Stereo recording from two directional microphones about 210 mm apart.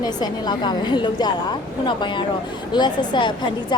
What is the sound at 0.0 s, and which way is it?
Speech, 20° left (ahead or behind).